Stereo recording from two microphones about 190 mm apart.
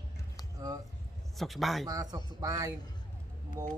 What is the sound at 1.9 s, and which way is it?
Speech, 20° right (ahead or behind).